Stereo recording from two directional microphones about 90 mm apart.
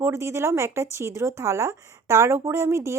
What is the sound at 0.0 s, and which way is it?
A woman's voice, 30° right (ahead or behind).